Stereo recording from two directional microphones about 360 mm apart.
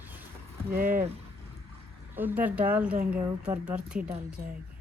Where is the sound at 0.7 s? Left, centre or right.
Right.